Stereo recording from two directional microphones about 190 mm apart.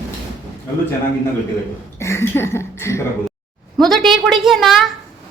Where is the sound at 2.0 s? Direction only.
15° left (ahead or behind).